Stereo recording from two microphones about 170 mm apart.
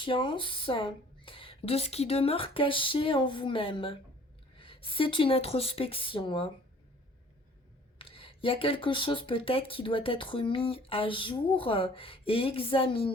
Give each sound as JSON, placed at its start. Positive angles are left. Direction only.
{"t": 0.0, "sound": "speech", "side_deg": 30}
{"t": 7.9, "sound": "speech", "side_deg": 35}